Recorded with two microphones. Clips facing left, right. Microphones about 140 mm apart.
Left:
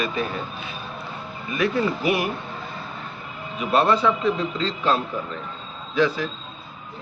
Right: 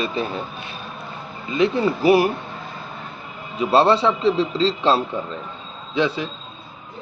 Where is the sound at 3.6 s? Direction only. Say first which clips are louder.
Right 3 dB; 30° right (ahead or behind).